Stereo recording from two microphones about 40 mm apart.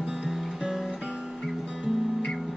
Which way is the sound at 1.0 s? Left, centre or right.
Right.